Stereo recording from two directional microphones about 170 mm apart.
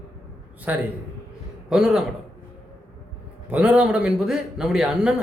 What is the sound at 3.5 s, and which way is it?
A man's voice, 10° right (ahead or behind).